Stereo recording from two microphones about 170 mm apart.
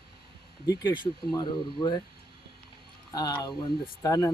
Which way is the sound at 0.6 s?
20° left (ahead or behind).